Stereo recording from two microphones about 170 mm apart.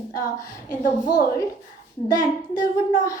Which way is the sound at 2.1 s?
25° left (ahead or behind).